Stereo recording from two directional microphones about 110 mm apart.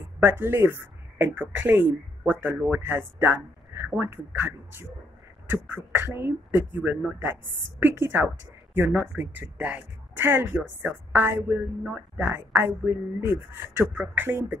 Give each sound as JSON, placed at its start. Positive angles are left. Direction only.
{"t": 0.2, "sound": "speech", "side_deg": -20}